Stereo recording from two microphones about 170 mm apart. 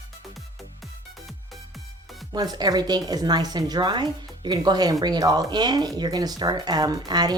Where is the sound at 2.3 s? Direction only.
25° right (ahead or behind).